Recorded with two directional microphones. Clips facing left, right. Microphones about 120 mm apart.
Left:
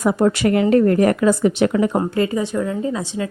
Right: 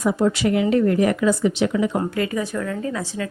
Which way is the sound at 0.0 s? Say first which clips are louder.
Left 3 dB; 55° left (ahead or behind).